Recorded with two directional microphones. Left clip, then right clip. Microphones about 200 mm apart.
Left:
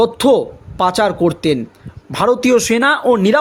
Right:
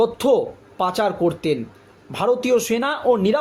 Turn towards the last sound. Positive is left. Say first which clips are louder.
# left 6 dB
turn(degrees=45)  # may be behind; listen again after turning